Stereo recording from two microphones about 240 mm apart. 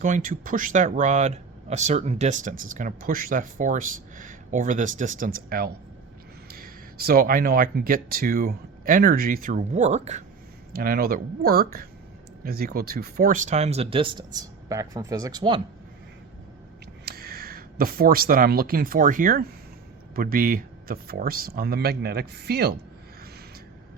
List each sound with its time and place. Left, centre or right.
0.0 s speech: right
10.7 s speech: right; by 15.6 s centre
17.1 s speech: right